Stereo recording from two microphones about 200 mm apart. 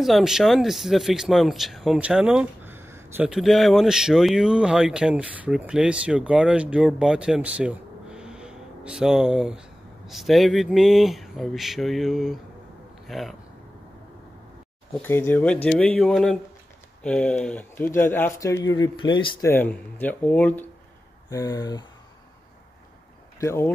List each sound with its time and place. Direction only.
0.0 s speech: centre (ahead or behind)
15.0 s speech: 10° left (ahead or behind)
19.5 s speech: 10° left (ahead or behind)
23.4 s speech: 15° left (ahead or behind)